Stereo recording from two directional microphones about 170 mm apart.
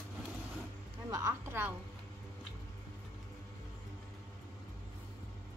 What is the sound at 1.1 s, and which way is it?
Speech, 15° right (ahead or behind).